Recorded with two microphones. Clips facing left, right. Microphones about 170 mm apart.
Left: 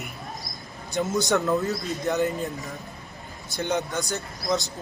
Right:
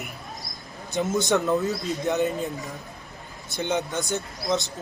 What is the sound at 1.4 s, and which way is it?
Speech, centre (ahead or behind).